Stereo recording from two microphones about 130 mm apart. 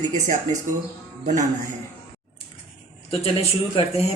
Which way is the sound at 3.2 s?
50° left (ahead or behind).